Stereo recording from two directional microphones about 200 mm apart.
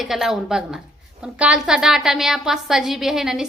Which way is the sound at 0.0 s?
Centre (ahead or behind).